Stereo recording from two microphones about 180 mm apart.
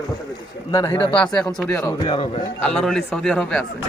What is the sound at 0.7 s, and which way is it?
Speech, 20° left (ahead or behind).